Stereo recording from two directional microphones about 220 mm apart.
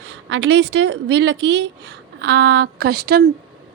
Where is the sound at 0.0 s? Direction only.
55° right (ahead or behind).